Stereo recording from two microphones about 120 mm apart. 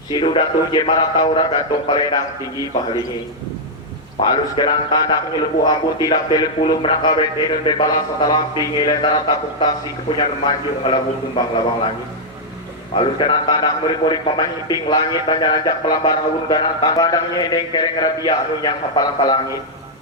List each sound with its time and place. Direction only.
0.1 s a man's voice: 45° left (ahead or behind)
4.2 s a man's voice: 40° left (ahead or behind)
13.0 s a man's voice: 40° left (ahead or behind)